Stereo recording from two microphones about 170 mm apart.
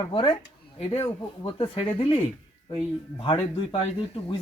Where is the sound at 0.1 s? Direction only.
30° left (ahead or behind).